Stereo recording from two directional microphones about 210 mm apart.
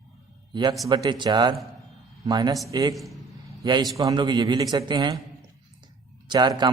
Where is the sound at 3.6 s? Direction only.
20° right (ahead or behind).